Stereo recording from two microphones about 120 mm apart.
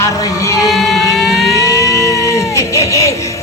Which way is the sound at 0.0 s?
25° left (ahead or behind).